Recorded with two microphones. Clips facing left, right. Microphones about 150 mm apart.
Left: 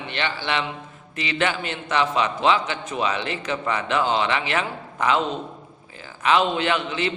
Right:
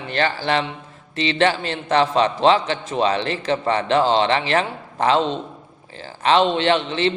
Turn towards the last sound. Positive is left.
turn(degrees=-30)  # may be behind; listen again after turning